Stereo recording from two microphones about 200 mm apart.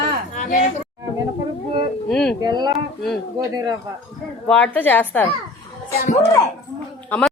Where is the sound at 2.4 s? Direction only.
20° right (ahead or behind).